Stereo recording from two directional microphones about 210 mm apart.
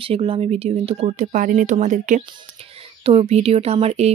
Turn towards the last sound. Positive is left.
turn(degrees=-30)  # may be behind; listen again after turning